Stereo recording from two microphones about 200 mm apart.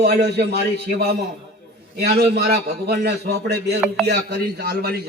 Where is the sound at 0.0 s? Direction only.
55° right (ahead or behind).